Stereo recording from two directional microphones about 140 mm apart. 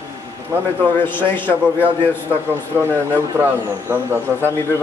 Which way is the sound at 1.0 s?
15° left (ahead or behind).